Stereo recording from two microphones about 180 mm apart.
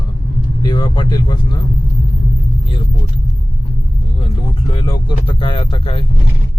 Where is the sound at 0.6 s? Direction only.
25° left (ahead or behind).